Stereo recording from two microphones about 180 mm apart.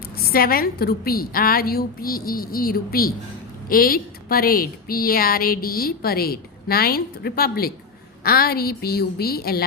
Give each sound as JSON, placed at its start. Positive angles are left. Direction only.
{"t": 0.2, "sound": "a woman's voice", "side_deg": 55}